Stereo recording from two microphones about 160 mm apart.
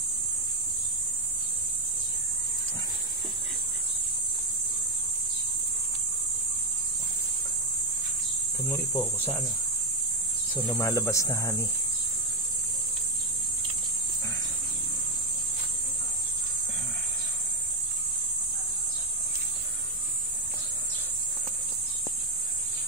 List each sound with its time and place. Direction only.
8.6 s speech: 15° left (ahead or behind)
10.5 s cricket: 15° left (ahead or behind)